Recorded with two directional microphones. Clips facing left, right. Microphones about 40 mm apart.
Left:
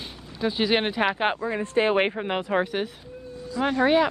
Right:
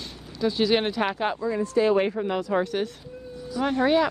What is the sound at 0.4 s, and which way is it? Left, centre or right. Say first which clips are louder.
Speech: right 1 dB; left.